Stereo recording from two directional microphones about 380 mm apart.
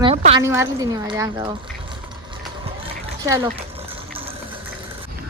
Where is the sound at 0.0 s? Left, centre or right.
Centre.